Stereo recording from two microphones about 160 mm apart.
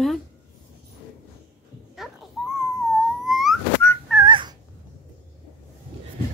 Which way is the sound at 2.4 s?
5° right (ahead or behind).